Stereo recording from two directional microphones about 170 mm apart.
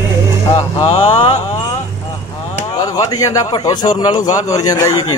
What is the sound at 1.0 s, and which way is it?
Speech, 25° left (ahead or behind).